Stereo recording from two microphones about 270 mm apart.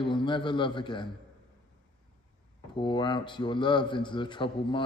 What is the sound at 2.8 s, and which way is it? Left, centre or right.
A man's voice, centre.